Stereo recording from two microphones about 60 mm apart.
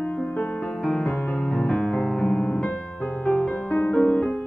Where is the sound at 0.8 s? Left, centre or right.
Centre.